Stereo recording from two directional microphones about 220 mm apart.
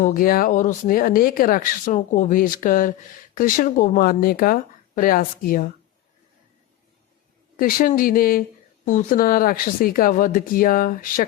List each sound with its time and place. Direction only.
0.0 s speech: 40° left (ahead or behind)
7.5 s speech: 40° left (ahead or behind)